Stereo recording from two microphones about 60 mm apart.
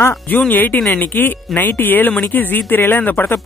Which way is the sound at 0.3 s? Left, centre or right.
Left.